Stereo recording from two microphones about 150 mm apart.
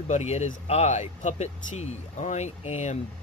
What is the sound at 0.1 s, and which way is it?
Speech, 50° left (ahead or behind).